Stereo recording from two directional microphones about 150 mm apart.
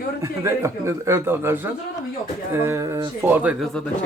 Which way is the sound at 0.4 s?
20° right (ahead or behind).